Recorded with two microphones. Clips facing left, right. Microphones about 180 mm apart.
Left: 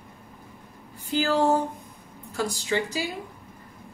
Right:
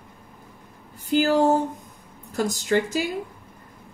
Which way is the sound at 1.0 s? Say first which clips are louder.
Right 4 dB; 45° right (ahead or behind).